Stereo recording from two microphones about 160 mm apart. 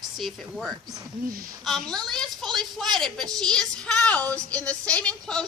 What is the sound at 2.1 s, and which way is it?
A woman's voice, centre (ahead or behind).